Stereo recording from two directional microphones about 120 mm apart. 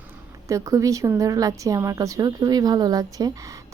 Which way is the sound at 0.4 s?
25° right (ahead or behind).